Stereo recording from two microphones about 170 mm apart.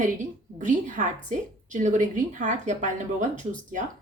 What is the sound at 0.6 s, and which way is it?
A woman's voice, 45° right (ahead or behind).